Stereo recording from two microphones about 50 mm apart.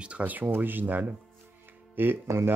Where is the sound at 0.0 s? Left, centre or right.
Right.